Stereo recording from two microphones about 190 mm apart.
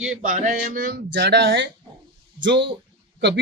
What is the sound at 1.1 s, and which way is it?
Speech, 65° right (ahead or behind).